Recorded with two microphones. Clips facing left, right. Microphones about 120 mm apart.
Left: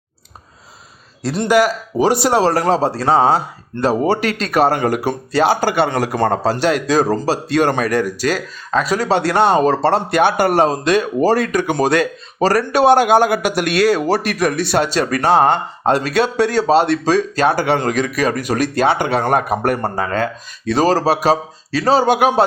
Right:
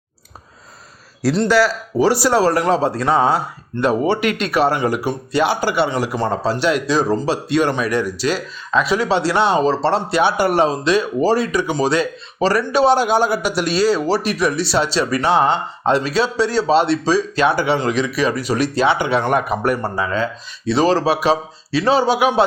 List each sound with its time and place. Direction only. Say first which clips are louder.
1.4 s speech: left 2 dB; 15° left (ahead or behind)
2.5 s a man's voice: left 1 dB; 35° left (ahead or behind)